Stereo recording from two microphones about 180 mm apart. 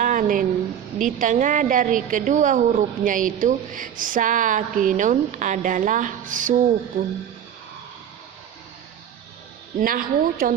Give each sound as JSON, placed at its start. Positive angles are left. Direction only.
{"t": 0.0, "sound": "a sound", "side_deg": -45}
{"t": 0.9, "sound": "a woman's voice", "side_deg": -45}
{"t": 9.8, "sound": "a woman's voice", "side_deg": -55}